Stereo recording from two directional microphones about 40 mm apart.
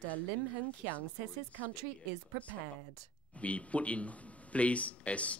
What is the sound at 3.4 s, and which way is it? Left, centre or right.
Speech, left.